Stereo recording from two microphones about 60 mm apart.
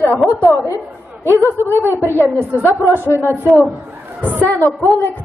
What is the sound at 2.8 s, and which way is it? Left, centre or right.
Speech, left.